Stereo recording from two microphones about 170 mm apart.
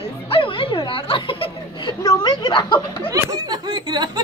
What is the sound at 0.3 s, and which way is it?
Speech, 30° left (ahead or behind).